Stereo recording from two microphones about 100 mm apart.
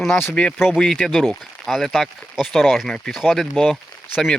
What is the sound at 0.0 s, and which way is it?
Speech, 10° left (ahead or behind).